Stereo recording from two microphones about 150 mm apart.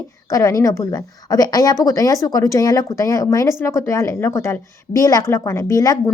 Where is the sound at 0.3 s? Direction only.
25° left (ahead or behind).